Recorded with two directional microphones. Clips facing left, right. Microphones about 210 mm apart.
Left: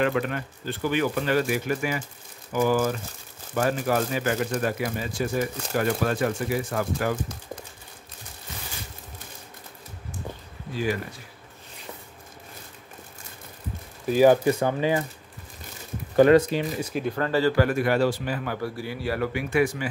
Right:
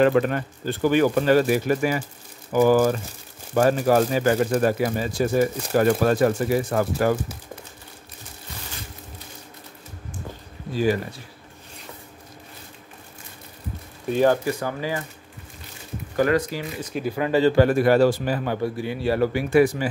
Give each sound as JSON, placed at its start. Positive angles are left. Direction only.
{"t": 0.0, "sound": "speech", "side_deg": -40}
{"t": 14.0, "sound": "speech", "side_deg": 5}
{"t": 14.3, "sound": "speech", "side_deg": 25}
{"t": 16.2, "sound": "speech", "side_deg": 25}
{"t": 16.8, "sound": "a man's voice", "side_deg": 0}